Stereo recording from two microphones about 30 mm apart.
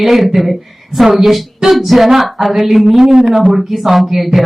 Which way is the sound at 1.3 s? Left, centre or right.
Centre.